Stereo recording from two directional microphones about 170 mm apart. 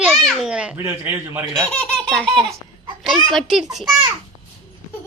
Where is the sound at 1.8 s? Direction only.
5° left (ahead or behind).